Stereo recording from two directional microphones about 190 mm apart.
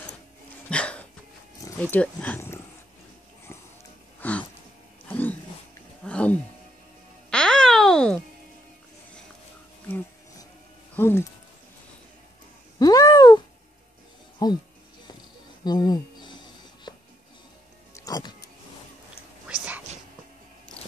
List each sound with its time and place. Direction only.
0.7 s a sound: 5° left (ahead or behind)
1.8 s speech: 5° left (ahead or behind)
4.2 s music: 5° left (ahead or behind)
5.0 s dog: 5° left (ahead or behind)
6.0 s a sound: 5° left (ahead or behind)
7.2 s music: 5° left (ahead or behind)
11.0 s music: 10° left (ahead or behind)
12.7 s cat: 20° left (ahead or behind)
14.4 s music: 20° left (ahead or behind)
15.6 s a sound: 20° left (ahead or behind)
17.9 s music: 20° left (ahead or behind)
19.4 s whispering: 5° right (ahead or behind)